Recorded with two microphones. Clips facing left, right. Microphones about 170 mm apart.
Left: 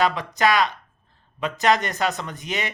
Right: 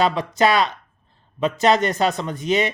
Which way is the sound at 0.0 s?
20° right (ahead or behind).